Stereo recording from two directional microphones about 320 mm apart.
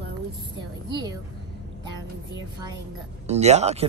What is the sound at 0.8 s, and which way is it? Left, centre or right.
Speech, centre.